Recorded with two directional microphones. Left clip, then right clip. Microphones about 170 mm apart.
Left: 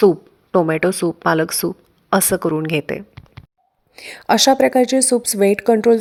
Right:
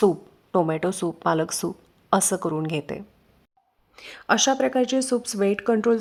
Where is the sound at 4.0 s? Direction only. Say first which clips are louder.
Left 6 dB; 25° left (ahead or behind).